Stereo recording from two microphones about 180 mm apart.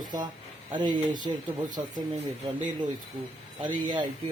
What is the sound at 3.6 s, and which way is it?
Speech, 25° right (ahead or behind).